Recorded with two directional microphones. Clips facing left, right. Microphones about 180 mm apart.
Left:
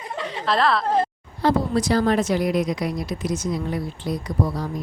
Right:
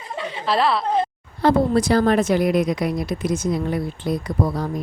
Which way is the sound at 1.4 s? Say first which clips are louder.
Right 3 dB; 55° right (ahead or behind).